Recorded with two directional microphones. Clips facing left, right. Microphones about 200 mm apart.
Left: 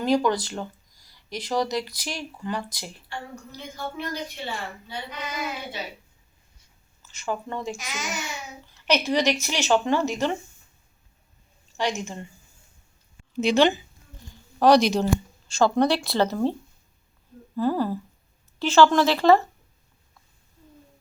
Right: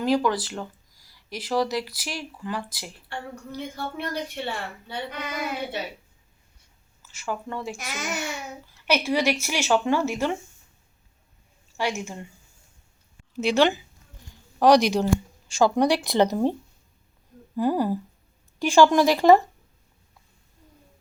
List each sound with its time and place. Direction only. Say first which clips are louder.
0.0 s speech: left 1 dB; 5° right (ahead or behind)
3.1 s a woman's voice: right 3 dB; 60° right (ahead or behind)
7.0 s speech: left 1 dB; 5° right (ahead or behind)
7.8 s a woman's voice: right 2 dB; 60° right (ahead or behind)
9.0 s speech: even; 10° right (ahead or behind)
11.8 s speech: left 1 dB; 10° right (ahead or behind)
13.4 s speech: left 1 dB; 10° right (ahead or behind)
17.6 s speech: right 1 dB; 15° right (ahead or behind)